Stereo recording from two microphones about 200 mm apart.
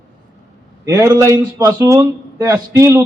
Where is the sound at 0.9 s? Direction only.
15° right (ahead or behind).